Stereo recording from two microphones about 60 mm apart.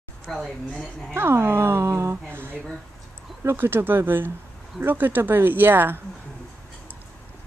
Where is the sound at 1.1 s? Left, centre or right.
Right.